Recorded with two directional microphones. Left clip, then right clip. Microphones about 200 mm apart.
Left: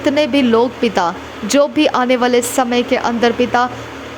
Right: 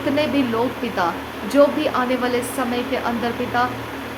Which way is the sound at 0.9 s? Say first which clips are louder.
Left 5 dB; 45° left (ahead or behind).